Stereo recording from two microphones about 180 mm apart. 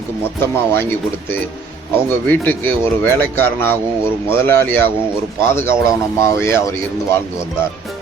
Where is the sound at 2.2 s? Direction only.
10° left (ahead or behind).